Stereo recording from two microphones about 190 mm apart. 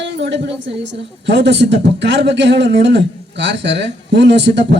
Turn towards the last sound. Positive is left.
turn(degrees=-65)  # may be behind; listen again after turning